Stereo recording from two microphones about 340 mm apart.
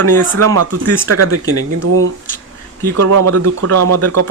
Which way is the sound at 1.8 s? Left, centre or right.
Right.